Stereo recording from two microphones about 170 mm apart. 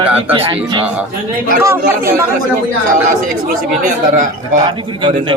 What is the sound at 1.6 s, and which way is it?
Speech, 15° right (ahead or behind).